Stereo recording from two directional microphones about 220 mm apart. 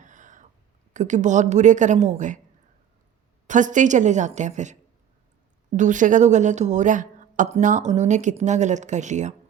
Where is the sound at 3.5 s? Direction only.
35° right (ahead or behind).